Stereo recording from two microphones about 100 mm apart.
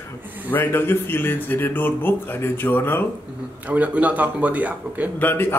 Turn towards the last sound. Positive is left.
turn(degrees=20)  # may be behind; listen again after turning